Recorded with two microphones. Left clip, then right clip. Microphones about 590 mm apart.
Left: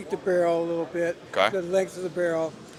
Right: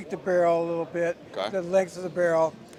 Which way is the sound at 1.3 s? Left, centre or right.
Left.